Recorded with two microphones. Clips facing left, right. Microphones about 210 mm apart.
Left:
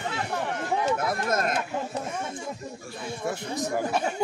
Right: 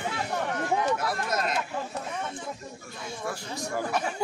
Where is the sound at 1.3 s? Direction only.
50° left (ahead or behind).